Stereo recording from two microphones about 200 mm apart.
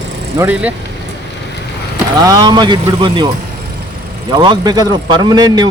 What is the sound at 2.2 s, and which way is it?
Speech, 20° right (ahead or behind).